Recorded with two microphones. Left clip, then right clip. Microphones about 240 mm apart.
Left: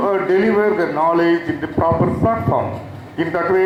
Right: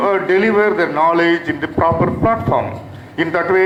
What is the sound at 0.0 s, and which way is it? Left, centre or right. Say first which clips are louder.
Speech: right 2 dB; centre.